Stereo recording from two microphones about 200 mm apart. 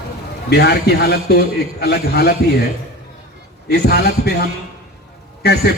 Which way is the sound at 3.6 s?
55° left (ahead or behind).